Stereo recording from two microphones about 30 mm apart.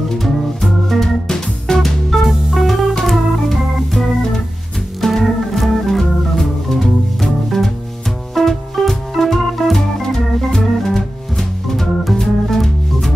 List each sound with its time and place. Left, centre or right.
0.2 s organ: centre
1.2 s music: centre
1.8 s music: centre
3.1 s organ: centre
6.3 s music: centre
8.4 s music: centre
10.0 s organ: centre
12.2 s music: centre